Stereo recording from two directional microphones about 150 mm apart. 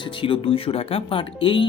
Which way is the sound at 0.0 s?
35° left (ahead or behind).